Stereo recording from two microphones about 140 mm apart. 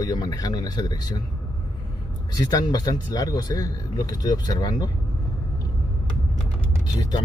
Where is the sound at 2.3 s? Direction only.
30° left (ahead or behind).